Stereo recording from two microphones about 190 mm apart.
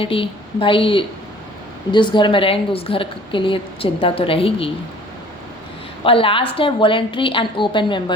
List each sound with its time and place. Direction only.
0.0 s a woman's voice: 30° left (ahead or behind)
6.0 s a woman's voice: 30° left (ahead or behind)